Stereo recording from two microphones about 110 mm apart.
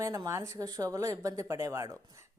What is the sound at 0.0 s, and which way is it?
A woman's voice, 30° right (ahead or behind).